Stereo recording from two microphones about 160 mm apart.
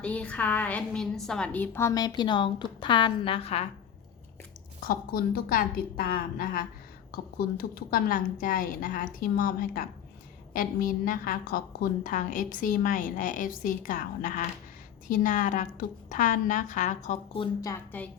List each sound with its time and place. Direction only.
0.0 s a woman's voice: 10° left (ahead or behind); by 3.7 s 40° left (ahead or behind)
4.8 s a woman's voice: 65° left (ahead or behind); by 17.2 s 50° left (ahead or behind)